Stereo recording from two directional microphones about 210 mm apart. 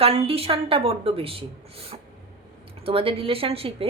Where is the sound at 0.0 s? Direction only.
30° right (ahead or behind).